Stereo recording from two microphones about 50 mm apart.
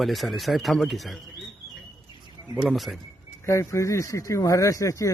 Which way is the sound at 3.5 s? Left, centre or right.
Left.